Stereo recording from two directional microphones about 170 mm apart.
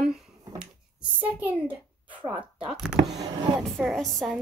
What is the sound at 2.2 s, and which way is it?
Speech, 30° right (ahead or behind).